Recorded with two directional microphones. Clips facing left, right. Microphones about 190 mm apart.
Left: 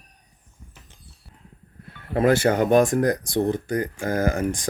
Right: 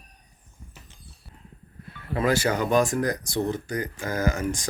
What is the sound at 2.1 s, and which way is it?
Speech, 55° left (ahead or behind).